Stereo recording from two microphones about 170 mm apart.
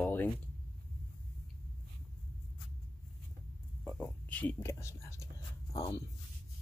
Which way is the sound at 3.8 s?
10° left (ahead or behind).